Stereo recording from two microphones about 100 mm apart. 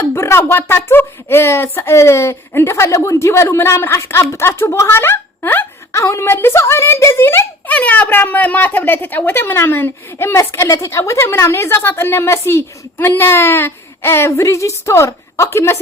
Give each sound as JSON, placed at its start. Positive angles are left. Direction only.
{"t": 0.1, "sound": "speech", "side_deg": 25}